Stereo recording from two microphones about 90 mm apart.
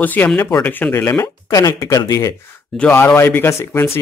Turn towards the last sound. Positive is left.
turn(degrees=30)  # may be behind; listen again after turning